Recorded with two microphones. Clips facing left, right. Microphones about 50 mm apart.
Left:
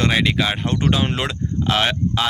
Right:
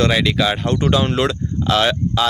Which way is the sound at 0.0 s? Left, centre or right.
Left.